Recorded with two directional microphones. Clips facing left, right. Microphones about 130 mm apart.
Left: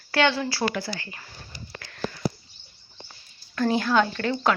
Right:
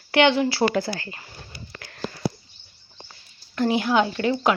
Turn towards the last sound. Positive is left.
turn(degrees=-10)  # may be behind; listen again after turning